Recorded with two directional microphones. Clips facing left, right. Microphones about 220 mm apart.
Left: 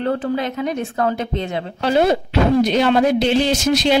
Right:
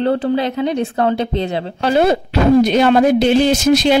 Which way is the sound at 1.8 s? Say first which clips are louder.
Right 2 dB; 50° right (ahead or behind).